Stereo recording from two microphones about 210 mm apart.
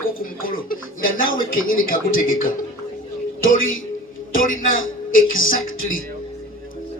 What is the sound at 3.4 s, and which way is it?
Speech, 70° left (ahead or behind).